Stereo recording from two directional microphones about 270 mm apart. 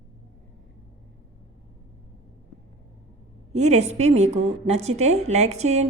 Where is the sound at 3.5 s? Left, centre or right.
Right.